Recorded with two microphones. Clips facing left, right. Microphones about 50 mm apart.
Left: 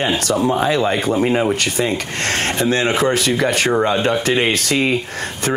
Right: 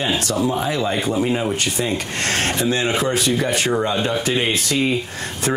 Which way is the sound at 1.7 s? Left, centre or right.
Left.